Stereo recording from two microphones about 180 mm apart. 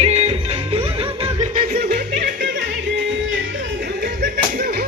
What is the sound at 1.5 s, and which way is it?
Music, 55° right (ahead or behind).